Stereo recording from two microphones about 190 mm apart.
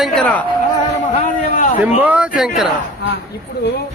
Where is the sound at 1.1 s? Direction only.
35° left (ahead or behind).